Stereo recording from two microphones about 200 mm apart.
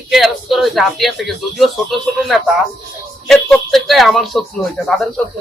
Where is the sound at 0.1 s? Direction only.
Centre (ahead or behind).